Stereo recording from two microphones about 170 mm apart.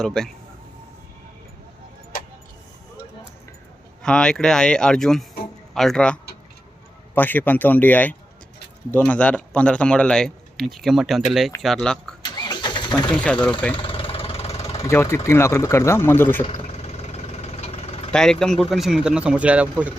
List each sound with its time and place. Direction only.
0.0 s speech: 5° left (ahead or behind)
4.0 s speech: 5° left (ahead or behind)
12.2 s engine starting: 25° left (ahead or behind)
13.1 s speech: 5° left (ahead or behind)
13.7 s vehicle: 30° left (ahead or behind)
14.8 s speech: 15° left (ahead or behind)
16.4 s vehicle: 40° left (ahead or behind)
18.1 s speech: 5° left (ahead or behind)